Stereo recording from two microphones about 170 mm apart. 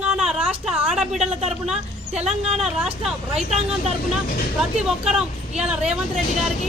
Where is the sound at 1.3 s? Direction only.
40° right (ahead or behind).